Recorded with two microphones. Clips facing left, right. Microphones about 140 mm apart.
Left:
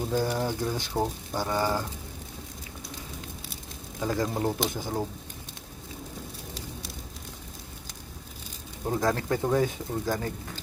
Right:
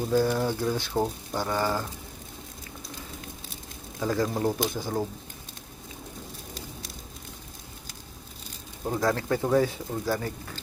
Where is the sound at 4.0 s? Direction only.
20° left (ahead or behind).